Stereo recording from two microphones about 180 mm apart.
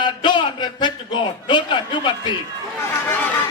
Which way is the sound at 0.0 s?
25° left (ahead or behind).